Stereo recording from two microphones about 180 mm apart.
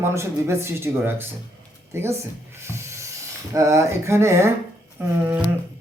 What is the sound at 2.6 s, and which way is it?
Rub, 15° right (ahead or behind).